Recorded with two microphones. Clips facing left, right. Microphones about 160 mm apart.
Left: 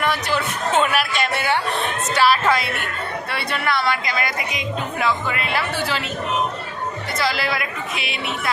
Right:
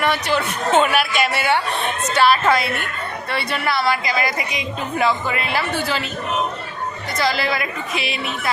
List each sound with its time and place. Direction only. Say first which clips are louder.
0.0 s a man's voice: right 2 dB; centre (ahead or behind)
7.2 s speech: right 3 dB; centre (ahead or behind)